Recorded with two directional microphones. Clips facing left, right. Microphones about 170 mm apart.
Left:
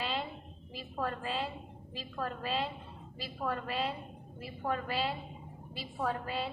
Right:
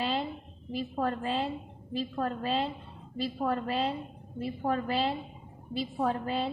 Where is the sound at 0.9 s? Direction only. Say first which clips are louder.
Right 4 dB; 40° right (ahead or behind).